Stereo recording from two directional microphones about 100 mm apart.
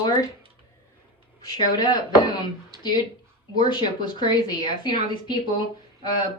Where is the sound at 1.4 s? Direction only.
45° left (ahead or behind).